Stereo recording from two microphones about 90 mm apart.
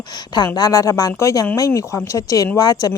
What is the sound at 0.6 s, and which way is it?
A woman's voice, 40° left (ahead or behind).